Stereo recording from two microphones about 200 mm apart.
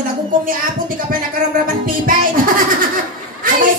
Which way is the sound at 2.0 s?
45° right (ahead or behind).